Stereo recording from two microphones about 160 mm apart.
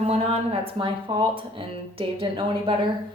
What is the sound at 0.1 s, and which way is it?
Speech, 40° right (ahead or behind).